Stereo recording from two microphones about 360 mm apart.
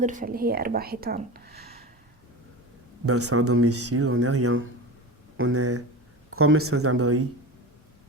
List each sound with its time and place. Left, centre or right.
0.0 s speech: right
3.1 s speech: right